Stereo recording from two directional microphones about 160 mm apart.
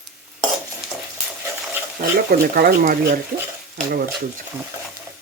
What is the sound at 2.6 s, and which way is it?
Speech, 70° right (ahead or behind).